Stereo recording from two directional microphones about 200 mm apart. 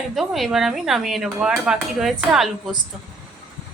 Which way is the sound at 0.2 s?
Centre (ahead or behind).